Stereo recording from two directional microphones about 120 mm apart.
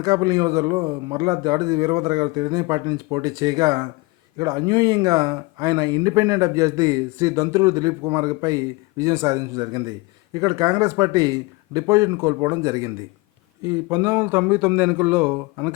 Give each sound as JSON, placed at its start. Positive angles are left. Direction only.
{"t": 0.0, "sound": "a man's voice", "side_deg": -30}